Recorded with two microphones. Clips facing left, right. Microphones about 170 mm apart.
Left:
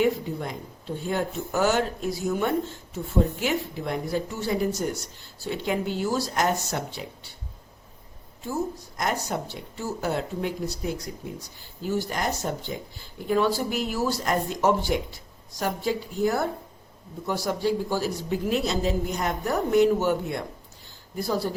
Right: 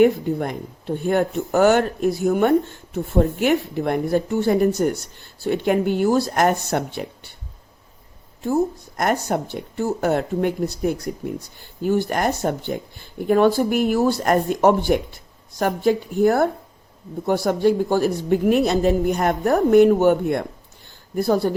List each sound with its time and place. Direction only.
0.0 s speech: 60° right (ahead or behind)
8.4 s speech: 55° right (ahead or behind)